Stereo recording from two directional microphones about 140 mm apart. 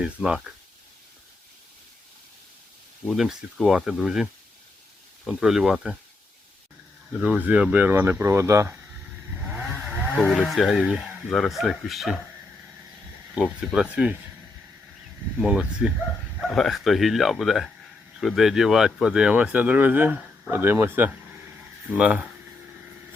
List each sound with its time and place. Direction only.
0.0 s speech: 5° right (ahead or behind)
3.0 s speech: centre (ahead or behind)
7.1 s speech: 5° right (ahead or behind)
10.3 s speech: centre (ahead or behind)
13.6 s speech: 5° right (ahead or behind)
15.4 s speech: 5° right (ahead or behind)